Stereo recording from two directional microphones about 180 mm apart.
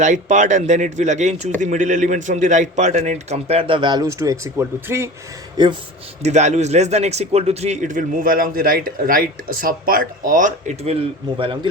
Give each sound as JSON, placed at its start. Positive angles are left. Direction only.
{"t": 0.0, "sound": "a man's voice", "side_deg": -45}
{"t": 5.6, "sound": "speech", "side_deg": -25}
{"t": 6.2, "sound": "a man's voice", "side_deg": -40}